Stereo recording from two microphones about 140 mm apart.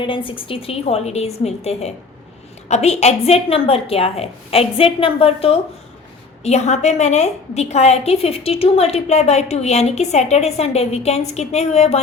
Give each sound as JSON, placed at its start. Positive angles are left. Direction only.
{"t": 0.0, "sound": "a woman's voice", "side_deg": 35}